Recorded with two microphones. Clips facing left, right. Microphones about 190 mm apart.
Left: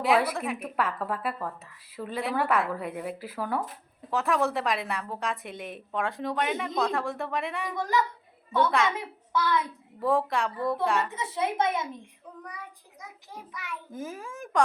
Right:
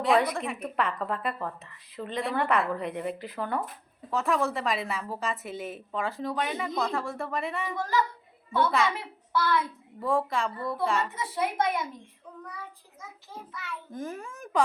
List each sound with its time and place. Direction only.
0.0 s a woman's voice: 5° left (ahead or behind)
7.8 s a child's voice: 20° left (ahead or behind)
10.0 s a woman's voice: centre (ahead or behind)
11.1 s a child's voice: 25° left (ahead or behind); by 14.6 s centre (ahead or behind)